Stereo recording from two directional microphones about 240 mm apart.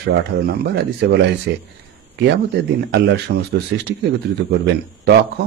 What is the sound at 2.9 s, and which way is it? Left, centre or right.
Speech, right.